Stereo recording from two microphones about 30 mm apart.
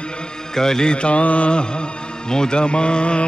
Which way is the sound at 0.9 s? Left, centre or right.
Left.